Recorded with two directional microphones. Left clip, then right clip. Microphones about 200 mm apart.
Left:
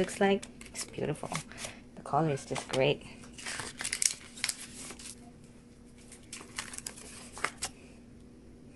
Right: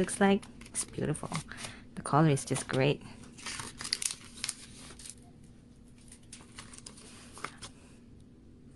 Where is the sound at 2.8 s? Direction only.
15° right (ahead or behind).